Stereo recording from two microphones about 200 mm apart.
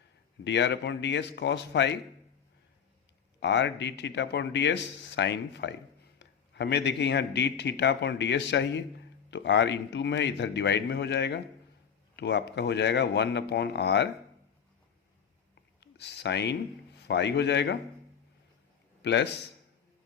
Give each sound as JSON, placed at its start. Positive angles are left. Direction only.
{"t": 0.4, "sound": "a man's voice", "side_deg": 60}
{"t": 3.4, "sound": "a man's voice", "side_deg": 60}
{"t": 15.8, "sound": "a man's voice", "side_deg": 55}
{"t": 19.0, "sound": "a man's voice", "side_deg": 60}